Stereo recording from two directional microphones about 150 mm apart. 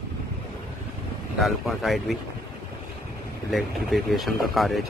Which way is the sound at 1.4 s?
Centre (ahead or behind).